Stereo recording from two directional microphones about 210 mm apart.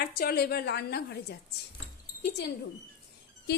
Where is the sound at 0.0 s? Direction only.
45° left (ahead or behind).